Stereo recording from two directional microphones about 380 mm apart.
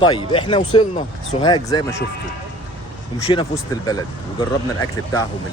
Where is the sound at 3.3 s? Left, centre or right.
Centre.